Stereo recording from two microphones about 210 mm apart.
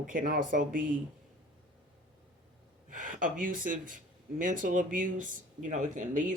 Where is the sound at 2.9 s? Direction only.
40° right (ahead or behind).